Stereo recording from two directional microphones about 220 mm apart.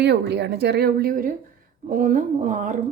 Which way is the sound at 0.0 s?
50° right (ahead or behind).